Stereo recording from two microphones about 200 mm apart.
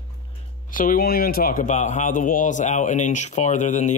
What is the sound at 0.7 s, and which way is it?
A man's voice, 45° left (ahead or behind).